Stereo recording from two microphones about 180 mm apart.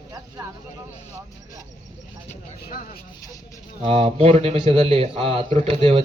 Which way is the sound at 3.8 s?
35° right (ahead or behind).